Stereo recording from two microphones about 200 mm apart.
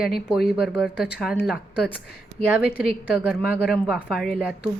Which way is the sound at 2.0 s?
50° left (ahead or behind).